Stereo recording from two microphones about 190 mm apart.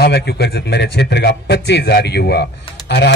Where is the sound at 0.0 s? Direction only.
60° left (ahead or behind).